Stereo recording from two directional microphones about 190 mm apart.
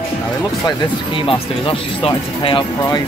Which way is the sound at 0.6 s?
25° left (ahead or behind).